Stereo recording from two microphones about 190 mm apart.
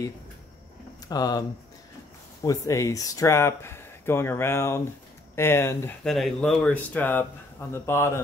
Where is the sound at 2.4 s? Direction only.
15° left (ahead or behind).